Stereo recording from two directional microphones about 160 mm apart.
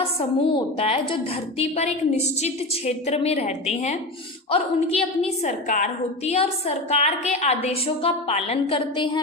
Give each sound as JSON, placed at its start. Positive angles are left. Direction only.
{"t": 0.0, "sound": "a woman's voice", "side_deg": 35}